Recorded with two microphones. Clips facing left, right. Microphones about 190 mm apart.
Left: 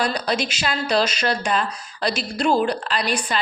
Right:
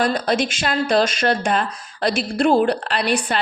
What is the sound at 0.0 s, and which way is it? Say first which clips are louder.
Speech: right 4 dB; 50° right (ahead or behind).